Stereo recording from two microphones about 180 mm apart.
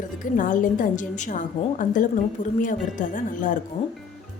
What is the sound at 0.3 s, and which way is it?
A woman's voice, 45° left (ahead or behind).